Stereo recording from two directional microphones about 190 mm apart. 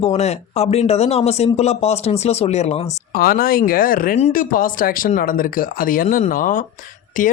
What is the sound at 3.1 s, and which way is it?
Speech, 50° left (ahead or behind).